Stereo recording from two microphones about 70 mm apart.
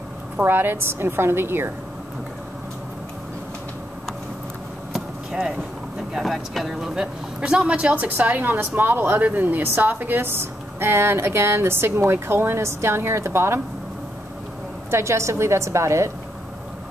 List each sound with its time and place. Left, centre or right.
0.4 s a woman's voice: right
4.9 s vehicle: centre
6.1 s speech: centre; by 13.6 s right
14.9 s a woman's voice: right